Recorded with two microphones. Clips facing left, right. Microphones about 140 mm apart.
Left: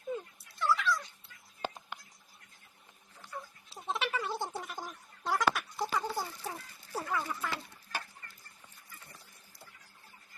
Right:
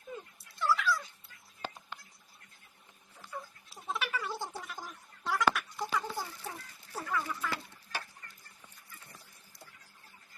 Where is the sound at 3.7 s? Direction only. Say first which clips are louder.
Left 2 dB; 25° left (ahead or behind).